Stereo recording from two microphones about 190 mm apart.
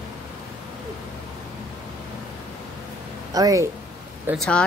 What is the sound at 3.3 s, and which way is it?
Speech, 20° right (ahead or behind).